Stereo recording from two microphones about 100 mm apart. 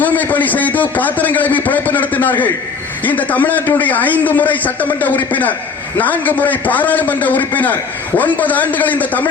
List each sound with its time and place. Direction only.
0.0 s a man's voice: 15° left (ahead or behind)